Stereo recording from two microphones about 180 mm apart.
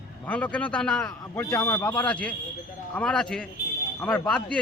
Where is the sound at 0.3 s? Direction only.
10° left (ahead or behind).